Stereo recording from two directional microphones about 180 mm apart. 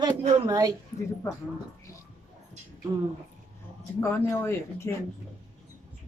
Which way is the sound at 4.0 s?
15° left (ahead or behind).